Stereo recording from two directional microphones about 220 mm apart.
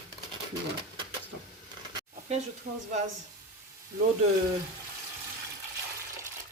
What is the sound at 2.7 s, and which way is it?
Speech, 35° right (ahead or behind).